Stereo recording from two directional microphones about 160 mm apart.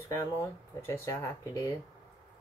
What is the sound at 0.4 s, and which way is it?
Speech, 15° left (ahead or behind).